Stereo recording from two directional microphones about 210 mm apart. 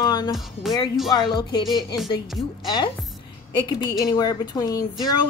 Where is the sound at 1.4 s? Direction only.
20° left (ahead or behind).